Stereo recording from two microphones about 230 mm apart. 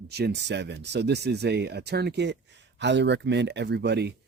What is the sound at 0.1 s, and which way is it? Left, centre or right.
Speech, right.